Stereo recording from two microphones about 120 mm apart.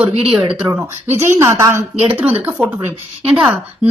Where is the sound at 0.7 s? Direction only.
25° right (ahead or behind).